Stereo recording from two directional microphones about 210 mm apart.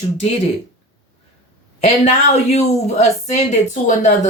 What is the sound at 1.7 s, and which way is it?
A woman's voice, 30° left (ahead or behind).